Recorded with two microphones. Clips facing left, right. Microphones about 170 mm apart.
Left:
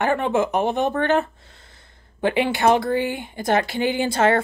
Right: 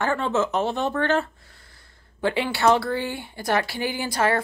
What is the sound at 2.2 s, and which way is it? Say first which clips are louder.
Speech: left 3 dB; 20° left (ahead or behind).